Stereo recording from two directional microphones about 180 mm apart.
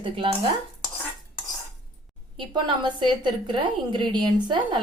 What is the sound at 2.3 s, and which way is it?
Speech, 25° right (ahead or behind).